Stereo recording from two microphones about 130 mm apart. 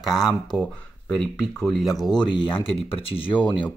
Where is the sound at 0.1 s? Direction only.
25° left (ahead or behind).